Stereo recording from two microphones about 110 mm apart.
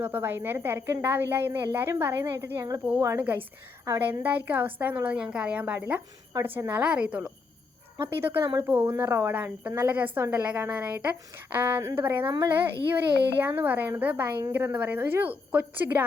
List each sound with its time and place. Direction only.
0.0 s a child's voice: 15° right (ahead or behind)